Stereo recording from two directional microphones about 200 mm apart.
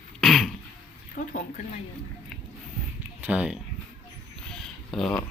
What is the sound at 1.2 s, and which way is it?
Speech, 45° left (ahead or behind).